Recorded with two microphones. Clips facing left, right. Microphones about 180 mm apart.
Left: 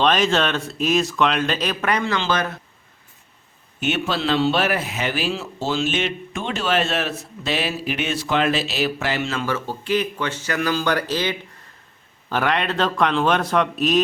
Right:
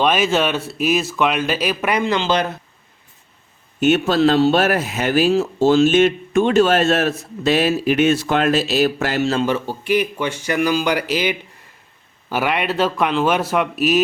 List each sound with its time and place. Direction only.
0.0 s speech: 5° right (ahead or behind)
3.8 s speech: 45° right (ahead or behind)
9.4 s a man's voice: 15° right (ahead or behind)